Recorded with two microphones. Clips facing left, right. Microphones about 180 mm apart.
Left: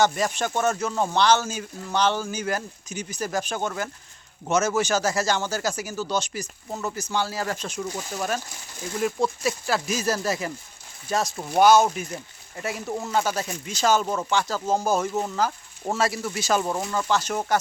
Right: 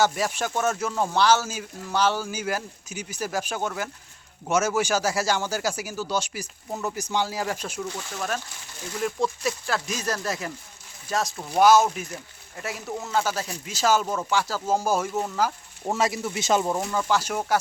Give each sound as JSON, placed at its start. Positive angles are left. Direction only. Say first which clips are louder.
{"t": 0.0, "sound": "speech", "louder": "left 1 dB", "side_deg": -5}
{"t": 7.8, "sound": "speech", "louder": "left 2 dB", "side_deg": 10}
{"t": 16.7, "sound": "speech", "louder": "even", "side_deg": -5}